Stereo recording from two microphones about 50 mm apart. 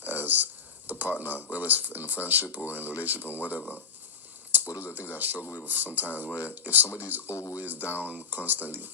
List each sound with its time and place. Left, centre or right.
0.0 s a sound: right
2.2 s speech: right
4.9 s speech: right
6.8 s speech: left
7.3 s speech: left
7.6 s speech: right